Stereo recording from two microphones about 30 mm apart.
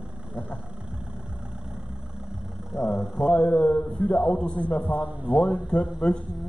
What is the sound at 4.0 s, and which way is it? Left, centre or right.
Speech, left.